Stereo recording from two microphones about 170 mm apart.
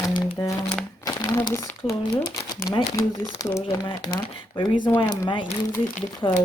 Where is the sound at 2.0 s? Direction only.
20° left (ahead or behind).